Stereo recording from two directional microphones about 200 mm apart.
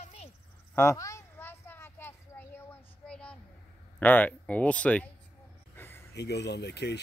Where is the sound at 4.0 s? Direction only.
10° left (ahead or behind).